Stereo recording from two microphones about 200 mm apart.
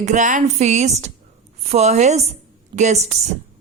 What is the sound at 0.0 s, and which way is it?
Speech, 35° right (ahead or behind).